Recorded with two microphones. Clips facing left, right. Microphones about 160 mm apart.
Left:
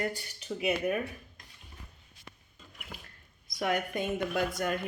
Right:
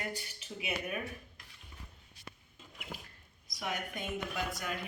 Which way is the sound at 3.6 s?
65° left (ahead or behind).